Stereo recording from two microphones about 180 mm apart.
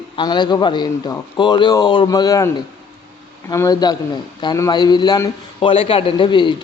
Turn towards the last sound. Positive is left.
turn(degrees=25)  # may be behind; listen again after turning